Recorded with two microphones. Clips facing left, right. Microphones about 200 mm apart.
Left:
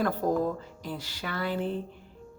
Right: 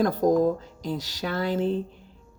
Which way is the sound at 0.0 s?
40° right (ahead or behind).